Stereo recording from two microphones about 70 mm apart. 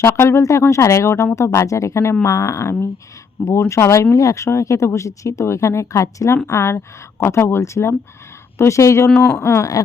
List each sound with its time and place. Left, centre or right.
0.0 s speech: left
9.0 s speech: centre
9.4 s speech: left